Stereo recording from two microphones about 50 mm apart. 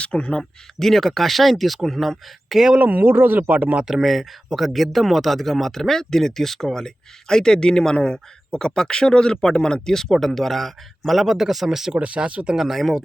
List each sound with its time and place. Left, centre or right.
0.0 s speech: left
0.8 s speech: centre
2.7 s speech: right
3.8 s speech: centre
11.9 s speech: right
12.5 s speech: centre